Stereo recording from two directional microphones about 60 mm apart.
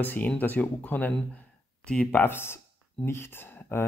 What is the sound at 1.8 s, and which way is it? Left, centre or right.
Speech, centre.